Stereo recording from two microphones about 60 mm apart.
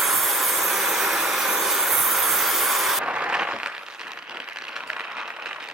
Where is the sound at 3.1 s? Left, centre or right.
Centre.